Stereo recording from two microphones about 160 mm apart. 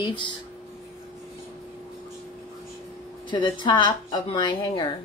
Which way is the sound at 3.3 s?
30° left (ahead or behind).